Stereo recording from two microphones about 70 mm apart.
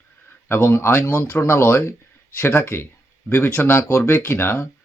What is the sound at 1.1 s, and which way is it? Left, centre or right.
Speech, left.